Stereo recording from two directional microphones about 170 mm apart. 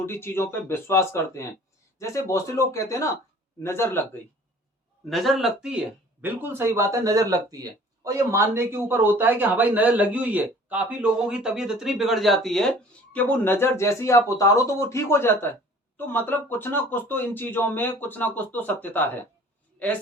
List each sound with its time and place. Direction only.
0.0 s speech: 15° left (ahead or behind)
5.0 s speech: centre (ahead or behind)
13.3 s speech: 10° left (ahead or behind)